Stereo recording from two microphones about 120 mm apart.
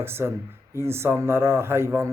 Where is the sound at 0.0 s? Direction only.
20° right (ahead or behind).